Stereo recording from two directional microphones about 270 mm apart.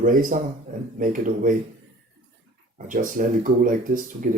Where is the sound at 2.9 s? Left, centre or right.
Right.